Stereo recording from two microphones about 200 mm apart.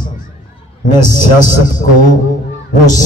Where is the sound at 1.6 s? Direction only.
40° left (ahead or behind).